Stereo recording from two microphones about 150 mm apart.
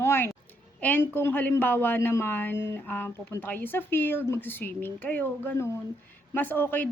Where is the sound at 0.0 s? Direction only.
15° left (ahead or behind).